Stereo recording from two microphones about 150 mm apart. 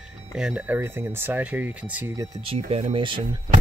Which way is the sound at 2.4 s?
40° right (ahead or behind).